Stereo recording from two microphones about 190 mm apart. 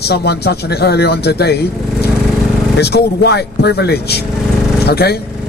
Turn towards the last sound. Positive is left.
turn(degrees=60)  # may be behind; listen again after turning